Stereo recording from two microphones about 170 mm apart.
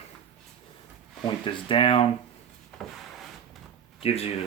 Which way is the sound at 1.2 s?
30° left (ahead or behind).